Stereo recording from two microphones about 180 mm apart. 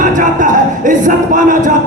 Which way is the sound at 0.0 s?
45° right (ahead or behind).